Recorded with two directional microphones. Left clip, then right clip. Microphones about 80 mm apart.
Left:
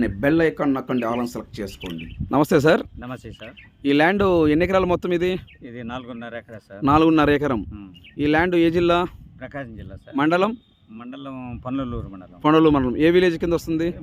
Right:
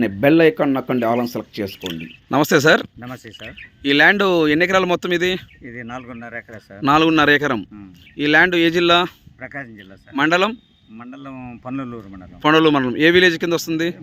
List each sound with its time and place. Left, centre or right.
0.0 s speech: right
1.8 s speech: centre
5.6 s speech: left
6.8 s a man's voice: centre
9.4 s speech: left
9.7 s a man's voice: centre
10.9 s speech: left
11.4 s speech: left
11.7 s speech: left
12.4 s a man's voice: centre